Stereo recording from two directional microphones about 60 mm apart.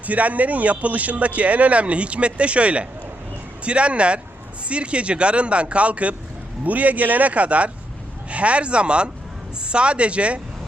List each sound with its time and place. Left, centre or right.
0.0 s a man's voice: right